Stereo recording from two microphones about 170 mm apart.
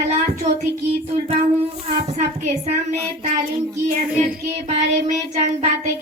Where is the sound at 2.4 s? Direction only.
45° right (ahead or behind).